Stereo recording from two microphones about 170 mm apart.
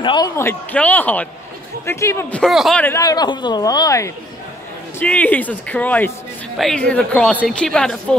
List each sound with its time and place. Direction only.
0.0 s speech: 25° left (ahead or behind)
0.4 s speech: 10° left (ahead or behind)
2.4 s a woman's voice: centre (ahead or behind)
2.8 s speech: 15° left (ahead or behind)
5.0 s a woman's voice: 10° left (ahead or behind)